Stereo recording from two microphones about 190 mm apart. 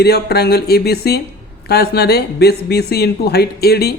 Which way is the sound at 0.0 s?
55° left (ahead or behind).